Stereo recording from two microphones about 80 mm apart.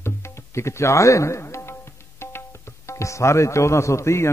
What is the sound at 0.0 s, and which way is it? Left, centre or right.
A man's voice, left.